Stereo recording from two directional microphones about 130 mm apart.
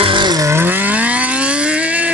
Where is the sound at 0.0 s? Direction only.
35° right (ahead or behind).